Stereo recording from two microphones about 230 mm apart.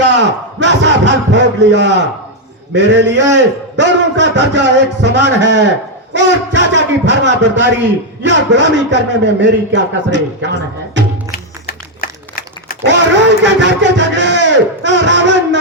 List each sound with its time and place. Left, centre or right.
0.0 s a man's voice: right
11.3 s music: left
13.4 s a man's voice: right